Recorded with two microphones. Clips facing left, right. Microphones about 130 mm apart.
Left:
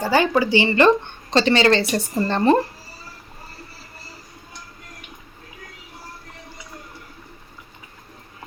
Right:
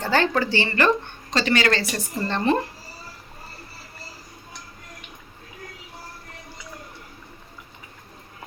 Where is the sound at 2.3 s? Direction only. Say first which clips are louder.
Left 5 dB; 40° left (ahead or behind).